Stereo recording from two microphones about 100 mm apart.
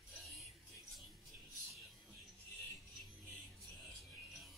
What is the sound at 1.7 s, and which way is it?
Music, centre (ahead or behind).